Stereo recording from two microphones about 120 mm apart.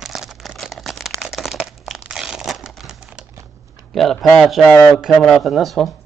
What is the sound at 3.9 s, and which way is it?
A man's voice, centre (ahead or behind).